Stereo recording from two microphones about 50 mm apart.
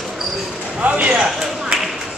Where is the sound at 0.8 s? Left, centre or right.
Right.